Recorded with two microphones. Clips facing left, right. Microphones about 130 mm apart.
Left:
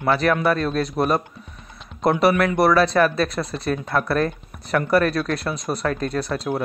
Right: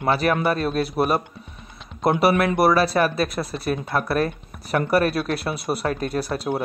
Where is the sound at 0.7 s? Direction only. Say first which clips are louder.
Even; 5° right (ahead or behind).